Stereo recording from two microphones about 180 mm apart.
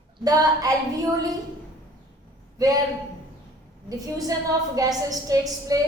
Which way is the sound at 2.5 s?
20° right (ahead or behind).